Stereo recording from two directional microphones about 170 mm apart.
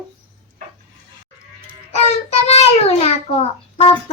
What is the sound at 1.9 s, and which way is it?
Child singing, 40° left (ahead or behind).